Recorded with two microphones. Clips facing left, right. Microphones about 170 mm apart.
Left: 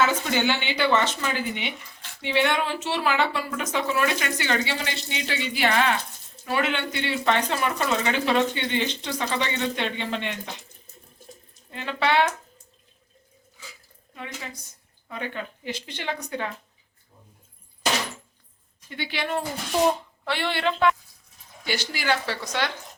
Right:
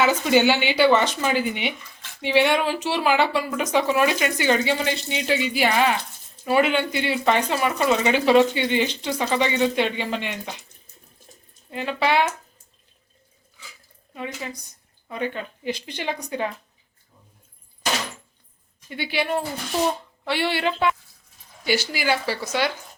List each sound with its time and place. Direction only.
0.0 s speech: 10° right (ahead or behind)
11.7 s speech: 10° right (ahead or behind)
14.2 s speech: 15° right (ahead or behind)
18.9 s speech: 10° right (ahead or behind)